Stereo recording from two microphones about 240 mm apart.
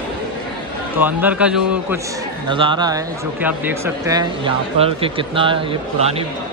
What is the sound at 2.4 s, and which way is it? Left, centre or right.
Speech, centre.